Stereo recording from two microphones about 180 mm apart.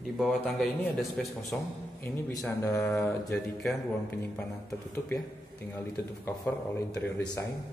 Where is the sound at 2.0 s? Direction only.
10° left (ahead or behind).